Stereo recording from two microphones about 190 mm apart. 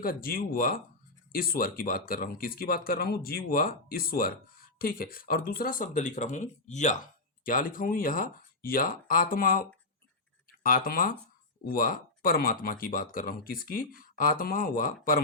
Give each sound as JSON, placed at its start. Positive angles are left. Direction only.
{"t": 0.0, "sound": "speech", "side_deg": 50}